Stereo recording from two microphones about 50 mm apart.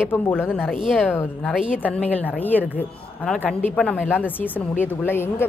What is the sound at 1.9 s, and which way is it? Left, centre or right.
Speech, left.